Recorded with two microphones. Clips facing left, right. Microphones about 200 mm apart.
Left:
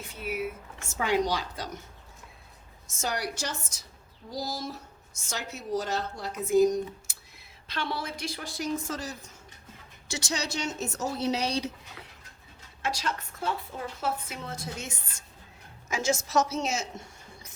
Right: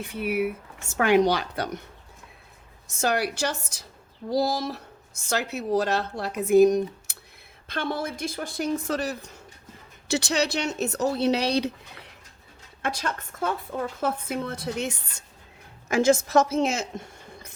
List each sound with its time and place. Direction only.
0.0 s a woman's voice: 65° right (ahead or behind)
3.0 s a woman's voice: 65° right (ahead or behind)
7.7 s a woman's voice: 50° right (ahead or behind)
12.8 s a woman's voice: 55° right (ahead or behind)